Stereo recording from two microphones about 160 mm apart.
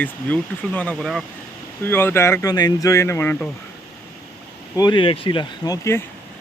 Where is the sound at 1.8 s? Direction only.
15° left (ahead or behind).